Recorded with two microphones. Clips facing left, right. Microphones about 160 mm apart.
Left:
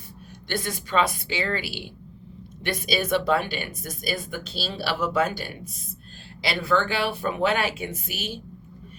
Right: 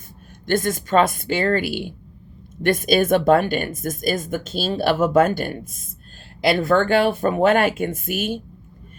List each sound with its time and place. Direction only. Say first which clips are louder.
0.4 s speech: right 9 dB; 45° right (ahead or behind)